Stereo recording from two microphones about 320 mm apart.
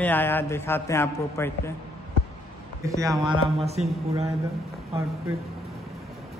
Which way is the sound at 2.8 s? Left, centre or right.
Centre.